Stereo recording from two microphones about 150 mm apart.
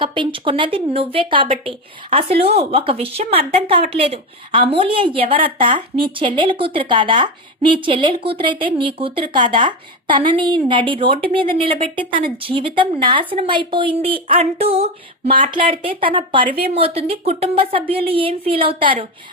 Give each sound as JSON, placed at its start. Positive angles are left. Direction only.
{"t": 0.0, "sound": "a woman's voice", "side_deg": -35}